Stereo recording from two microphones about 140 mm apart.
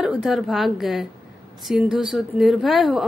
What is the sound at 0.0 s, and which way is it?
A woman's voice, centre (ahead or behind).